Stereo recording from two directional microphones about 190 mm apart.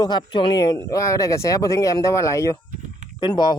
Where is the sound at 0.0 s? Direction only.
20° left (ahead or behind).